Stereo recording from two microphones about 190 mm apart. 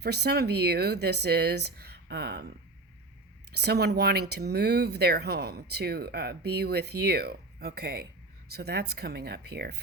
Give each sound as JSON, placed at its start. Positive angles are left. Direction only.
{"t": 0.0, "sound": "speech", "side_deg": -60}
{"t": 3.5, "sound": "speech", "side_deg": -60}